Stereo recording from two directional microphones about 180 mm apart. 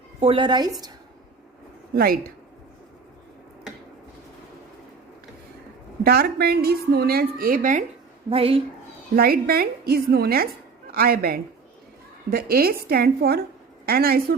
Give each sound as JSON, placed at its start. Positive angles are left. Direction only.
{"t": 0.2, "sound": "a woman's voice", "side_deg": -30}
{"t": 2.0, "sound": "a woman's voice", "side_deg": -55}
{"t": 6.0, "sound": "a woman's voice", "side_deg": -60}
{"t": 8.3, "sound": "a woman's voice", "side_deg": -30}
{"t": 9.1, "sound": "a woman's voice", "side_deg": -55}